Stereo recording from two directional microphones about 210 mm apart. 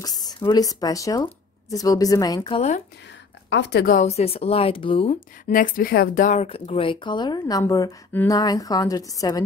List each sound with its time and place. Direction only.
0.0 s speech: 20° left (ahead or behind)
3.4 s a woman's voice: 55° left (ahead or behind)
4.1 s speech: 30° left (ahead or behind)
5.5 s speech: 40° left (ahead or behind); by 9.4 s 15° left (ahead or behind)